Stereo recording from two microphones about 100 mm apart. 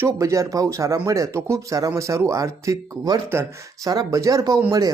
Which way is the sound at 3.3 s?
25° right (ahead or behind).